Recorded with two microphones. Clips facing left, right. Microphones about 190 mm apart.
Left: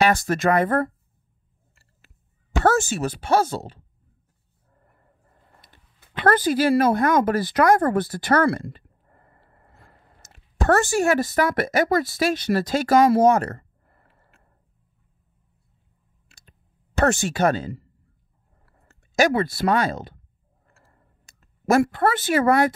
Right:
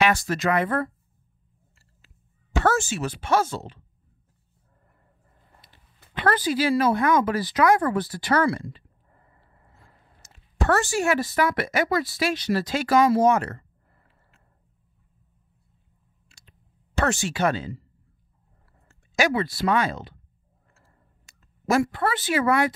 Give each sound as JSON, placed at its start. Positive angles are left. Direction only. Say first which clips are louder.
{"t": 0.0, "sound": "speech", "louder": "left 3 dB", "side_deg": 50}
{"t": 2.6, "sound": "speech", "louder": "left 4 dB", "side_deg": 40}
{"t": 5.6, "sound": "a sound", "louder": "left 2 dB", "side_deg": 50}
{"t": 6.2, "sound": "speech", "louder": "left 4 dB", "side_deg": 50}
{"t": 13.2, "sound": "a sound", "louder": "left 3 dB", "side_deg": 40}
{"t": 16.3, "sound": "a sound", "louder": "left 2 dB", "side_deg": 45}
{"t": 17.0, "sound": "speech", "louder": "left 4 dB", "side_deg": 45}
{"t": 19.1, "sound": "speech", "louder": "left 4 dB", "side_deg": 45}
{"t": 21.3, "sound": "speech", "louder": "left 4 dB", "side_deg": 50}